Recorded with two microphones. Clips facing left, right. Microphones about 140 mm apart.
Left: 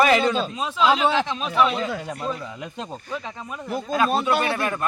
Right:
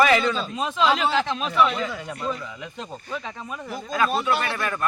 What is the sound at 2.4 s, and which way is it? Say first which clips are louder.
Speech: left 2 dB; 30° left (ahead or behind).